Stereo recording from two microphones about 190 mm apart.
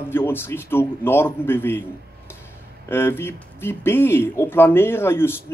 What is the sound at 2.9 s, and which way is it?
Speech, 10° left (ahead or behind).